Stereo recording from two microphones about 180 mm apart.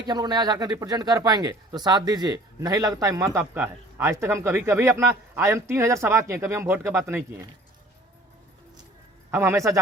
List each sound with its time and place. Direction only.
0.0 s speech: 25° right (ahead or behind)
9.3 s speech: 15° right (ahead or behind)